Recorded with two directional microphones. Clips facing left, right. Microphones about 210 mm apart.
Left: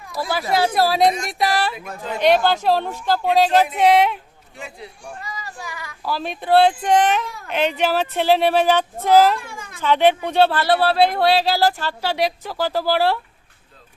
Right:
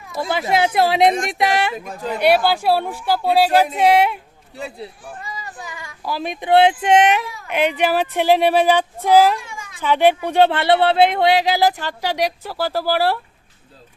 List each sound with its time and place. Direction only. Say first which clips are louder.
0.2 s speech: right 1 dB; 20° right (ahead or behind)
2.1 s speech: even; 10° right (ahead or behind)
4.5 s speech: right 5 dB; 35° right (ahead or behind)
5.2 s child singing: right 1 dB; 20° right (ahead or behind)
6.1 s speech: right 1 dB; 15° right (ahead or behind)
7.4 s speech: right 2 dB; 10° right (ahead or behind)
9.4 s a sound: even; 55° left (ahead or behind)
9.7 s speech: right 1 dB; 10° right (ahead or behind)